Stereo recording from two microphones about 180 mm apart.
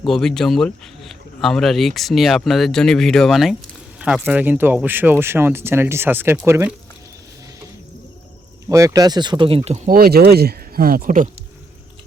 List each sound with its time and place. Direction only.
0.1 s speech: centre (ahead or behind); by 6.7 s 15° right (ahead or behind)
8.7 s speech: 20° right (ahead or behind); by 11.3 s 50° right (ahead or behind)